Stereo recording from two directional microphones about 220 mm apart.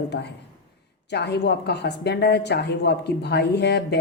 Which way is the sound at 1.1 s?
50° left (ahead or behind).